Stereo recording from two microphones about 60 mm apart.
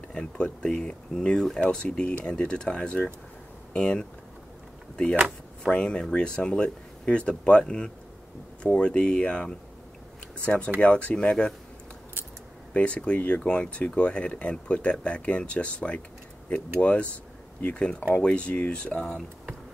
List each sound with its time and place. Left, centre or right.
0.1 s speech: centre
5.7 s speech: centre
12.7 s speech: left